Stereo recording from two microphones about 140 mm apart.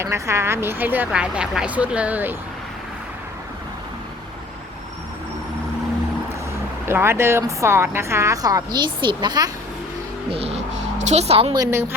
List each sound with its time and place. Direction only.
0.0 s speech: 20° right (ahead or behind)
6.8 s a woman's voice: 15° right (ahead or behind)
10.3 s speech: 45° right (ahead or behind)
11.5 s speech: 20° right (ahead or behind)